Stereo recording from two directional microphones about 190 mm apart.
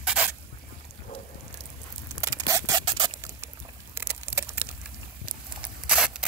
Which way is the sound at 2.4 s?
20° right (ahead or behind).